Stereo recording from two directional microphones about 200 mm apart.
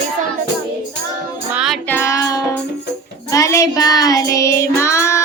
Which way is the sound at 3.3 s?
15° left (ahead or behind).